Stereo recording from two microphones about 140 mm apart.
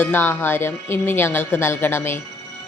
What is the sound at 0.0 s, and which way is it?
A woman's voice, 15° left (ahead or behind).